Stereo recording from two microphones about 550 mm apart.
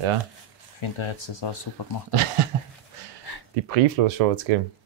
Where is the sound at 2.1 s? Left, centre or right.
Right.